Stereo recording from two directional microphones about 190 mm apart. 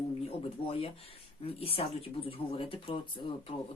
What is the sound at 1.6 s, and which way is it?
Speech, 30° left (ahead or behind).